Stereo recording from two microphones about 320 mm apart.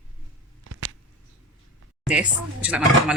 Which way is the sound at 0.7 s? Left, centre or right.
Right.